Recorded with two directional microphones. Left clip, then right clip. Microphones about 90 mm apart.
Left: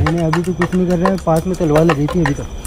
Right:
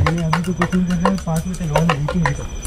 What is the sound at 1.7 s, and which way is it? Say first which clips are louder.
Speech: left 5 dB; 15° right (ahead or behind).